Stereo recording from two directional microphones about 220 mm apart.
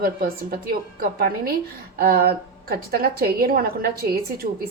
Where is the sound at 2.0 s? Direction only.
45° right (ahead or behind).